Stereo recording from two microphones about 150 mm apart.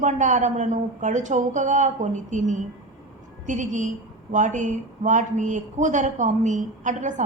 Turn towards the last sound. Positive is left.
turn(degrees=-55)  # may be behind; listen again after turning